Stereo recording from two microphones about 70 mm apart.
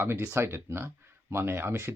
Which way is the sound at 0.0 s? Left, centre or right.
Right.